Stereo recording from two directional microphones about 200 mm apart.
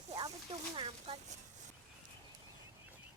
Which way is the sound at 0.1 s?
25° right (ahead or behind).